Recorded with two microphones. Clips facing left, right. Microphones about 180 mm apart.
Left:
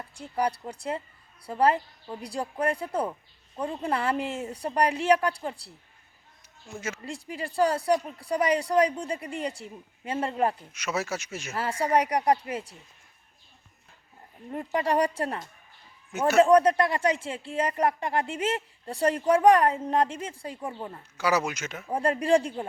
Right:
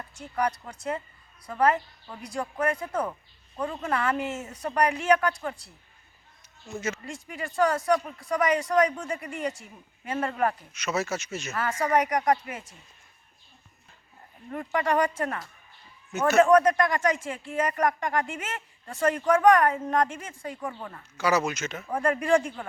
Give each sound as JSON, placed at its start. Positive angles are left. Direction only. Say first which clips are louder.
{"t": 0.1, "sound": "speech", "louder": "even", "side_deg": 30}
{"t": 6.7, "sound": "speech", "louder": "right 3 dB", "side_deg": 10}
{"t": 7.0, "sound": "speech", "louder": "left 1 dB", "side_deg": 30}
{"t": 10.8, "sound": "speech", "louder": "right 1 dB", "side_deg": 10}
{"t": 11.5, "sound": "speech", "louder": "even", "side_deg": 30}
{"t": 14.5, "sound": "speech", "louder": "even", "side_deg": 30}
{"t": 16.1, "sound": "speech", "louder": "even", "side_deg": 10}
{"t": 16.4, "sound": "speech", "louder": "even", "side_deg": 30}
{"t": 21.2, "sound": "speech", "louder": "right 1 dB", "side_deg": 10}
{"t": 21.9, "sound": "speech", "louder": "left 1 dB", "side_deg": 30}